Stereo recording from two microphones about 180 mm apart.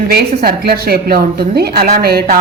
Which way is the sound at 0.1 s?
60° right (ahead or behind).